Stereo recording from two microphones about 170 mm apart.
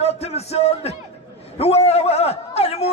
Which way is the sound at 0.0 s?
40° left (ahead or behind).